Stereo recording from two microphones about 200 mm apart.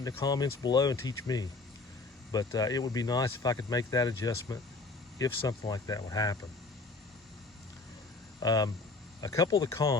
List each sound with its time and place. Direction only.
0.0 s speech: 20° left (ahead or behind)
8.4 s speech: 20° left (ahead or behind)